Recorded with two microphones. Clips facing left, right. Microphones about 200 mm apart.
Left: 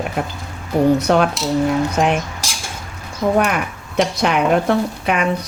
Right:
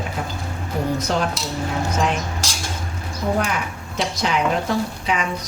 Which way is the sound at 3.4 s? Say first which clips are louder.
Left 5 dB; 60° left (ahead or behind).